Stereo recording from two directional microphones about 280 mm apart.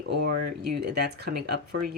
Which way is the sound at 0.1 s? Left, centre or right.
Right.